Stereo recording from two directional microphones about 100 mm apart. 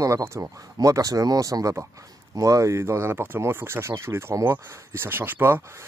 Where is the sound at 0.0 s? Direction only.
30° right (ahead or behind).